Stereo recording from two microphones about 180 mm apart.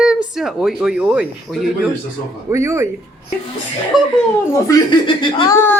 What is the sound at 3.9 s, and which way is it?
Speech, 5° right (ahead or behind).